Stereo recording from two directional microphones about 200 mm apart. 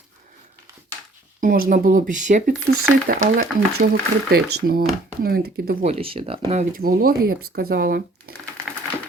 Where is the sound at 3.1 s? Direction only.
45° right (ahead or behind).